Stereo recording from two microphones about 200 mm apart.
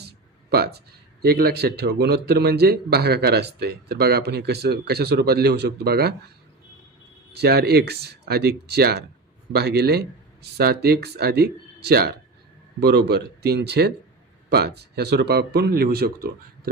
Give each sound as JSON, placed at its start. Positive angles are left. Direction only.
{"t": 1.2, "sound": "speech", "side_deg": -50}
{"t": 7.3, "sound": "speech", "side_deg": -55}
{"t": 14.9, "sound": "speech", "side_deg": -55}